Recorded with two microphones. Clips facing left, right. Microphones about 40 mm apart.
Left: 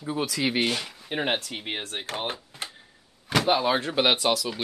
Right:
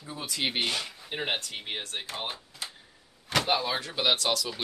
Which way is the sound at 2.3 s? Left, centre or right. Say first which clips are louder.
Left 4 dB; left.